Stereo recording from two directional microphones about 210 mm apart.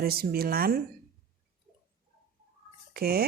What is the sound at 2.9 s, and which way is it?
Speech, 45° right (ahead or behind).